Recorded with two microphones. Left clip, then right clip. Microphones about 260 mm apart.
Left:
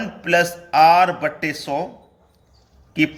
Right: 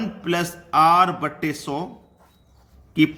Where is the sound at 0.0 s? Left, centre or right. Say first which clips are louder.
Left 7 dB; centre.